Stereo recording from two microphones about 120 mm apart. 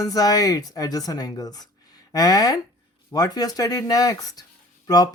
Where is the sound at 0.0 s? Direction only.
30° left (ahead or behind).